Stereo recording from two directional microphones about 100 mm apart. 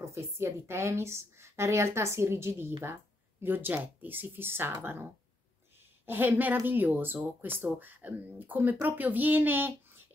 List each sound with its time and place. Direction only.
0.0 s a woman's voice: 30° right (ahead or behind)
6.0 s a woman's voice: 20° right (ahead or behind)